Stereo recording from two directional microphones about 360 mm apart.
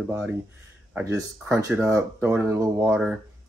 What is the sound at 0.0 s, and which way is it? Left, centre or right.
Speech, centre.